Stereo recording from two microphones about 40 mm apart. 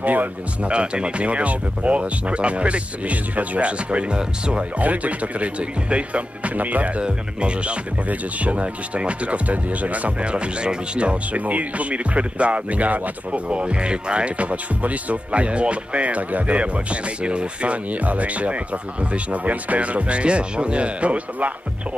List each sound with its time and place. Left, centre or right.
0.0 s speech: right
0.7 s speech: right
4.7 s speech: right
7.0 s speech: right